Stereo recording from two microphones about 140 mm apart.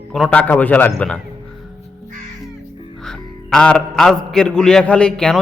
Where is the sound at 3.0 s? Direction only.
5° left (ahead or behind).